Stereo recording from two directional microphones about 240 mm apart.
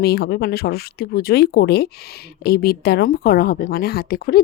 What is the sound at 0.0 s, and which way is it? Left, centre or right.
A woman's voice, left.